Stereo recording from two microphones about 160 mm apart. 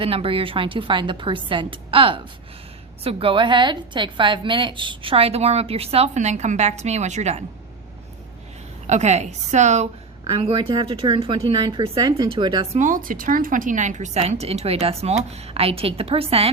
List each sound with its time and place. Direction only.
0.0 s a woman's voice: 35° right (ahead or behind)
8.9 s a woman's voice: 45° right (ahead or behind)
12.7 s a woman's voice: 55° right (ahead or behind); by 16.5 s 35° right (ahead or behind)